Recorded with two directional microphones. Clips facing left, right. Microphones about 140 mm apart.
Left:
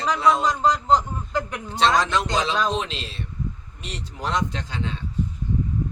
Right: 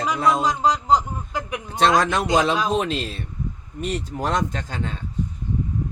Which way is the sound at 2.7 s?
50° right (ahead or behind).